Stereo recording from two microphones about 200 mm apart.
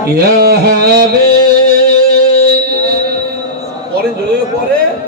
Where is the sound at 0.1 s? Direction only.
50° right (ahead or behind).